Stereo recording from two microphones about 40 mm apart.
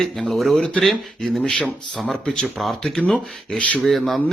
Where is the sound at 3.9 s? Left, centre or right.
Centre.